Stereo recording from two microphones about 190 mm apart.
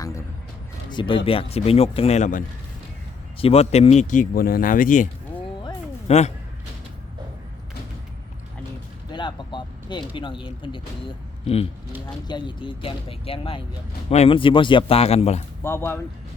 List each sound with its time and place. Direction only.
0.9 s speech: 25° left (ahead or behind); by 5.0 s 45° left (ahead or behind)
6.1 s speech: 35° left (ahead or behind)
9.0 s a sound: 25° left (ahead or behind)
10.2 s speech: 25° left (ahead or behind)
15.6 s speech: 15° left (ahead or behind)